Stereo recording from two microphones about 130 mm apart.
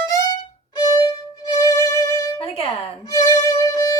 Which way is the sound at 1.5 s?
25° left (ahead or behind).